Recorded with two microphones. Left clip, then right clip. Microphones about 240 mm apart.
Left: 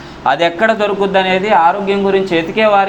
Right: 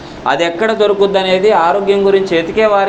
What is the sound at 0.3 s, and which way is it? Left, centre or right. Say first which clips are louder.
Speech: left 1 dB; left.